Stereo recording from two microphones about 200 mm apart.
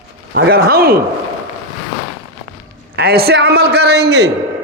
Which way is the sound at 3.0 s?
50° right (ahead or behind).